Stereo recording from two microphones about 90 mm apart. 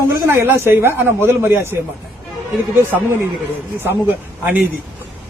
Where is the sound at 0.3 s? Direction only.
30° right (ahead or behind).